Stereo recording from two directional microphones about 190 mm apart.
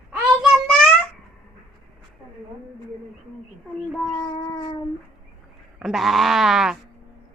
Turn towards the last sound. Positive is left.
turn(degrees=-5)  # may be behind; listen again after turning